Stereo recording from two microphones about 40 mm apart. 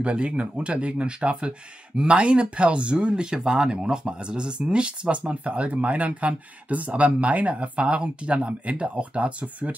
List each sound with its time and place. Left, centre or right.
0.0 s speech: right